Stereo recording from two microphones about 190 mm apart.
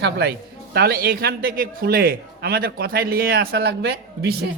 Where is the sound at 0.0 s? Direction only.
60° right (ahead or behind).